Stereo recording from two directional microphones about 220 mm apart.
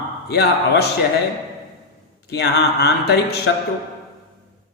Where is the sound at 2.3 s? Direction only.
50° left (ahead or behind).